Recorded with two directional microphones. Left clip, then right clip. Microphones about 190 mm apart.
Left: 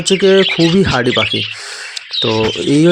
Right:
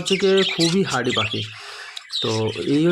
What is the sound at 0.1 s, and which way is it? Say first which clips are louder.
Speech: left 8 dB; 30° left (ahead or behind).